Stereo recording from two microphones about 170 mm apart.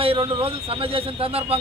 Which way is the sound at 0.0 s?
35° right (ahead or behind).